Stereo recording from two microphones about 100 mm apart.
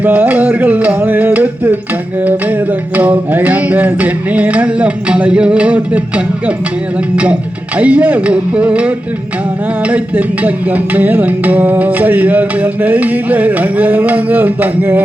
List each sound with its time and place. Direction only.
0.0 s music: 15° right (ahead or behind)
7.8 s music: 15° right (ahead or behind)
9.9 s music: 15° right (ahead or behind)